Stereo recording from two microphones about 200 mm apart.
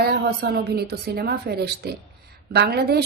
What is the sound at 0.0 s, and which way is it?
A woman's voice, 50° right (ahead or behind).